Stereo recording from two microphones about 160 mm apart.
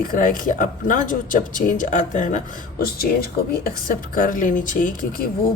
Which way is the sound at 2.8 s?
70° left (ahead or behind).